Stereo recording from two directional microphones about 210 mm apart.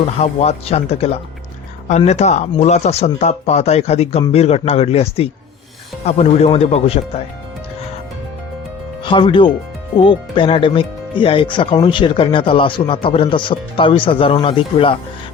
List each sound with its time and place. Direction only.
0.2 s speech: 30° left (ahead or behind)
9.0 s speech: 25° left (ahead or behind)